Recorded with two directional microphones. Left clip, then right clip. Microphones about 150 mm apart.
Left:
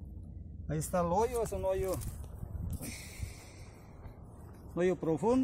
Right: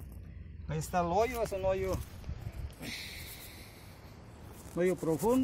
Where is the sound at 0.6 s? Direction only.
20° right (ahead or behind).